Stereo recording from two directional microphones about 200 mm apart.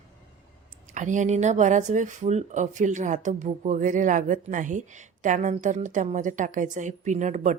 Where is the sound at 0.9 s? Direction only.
40° right (ahead or behind).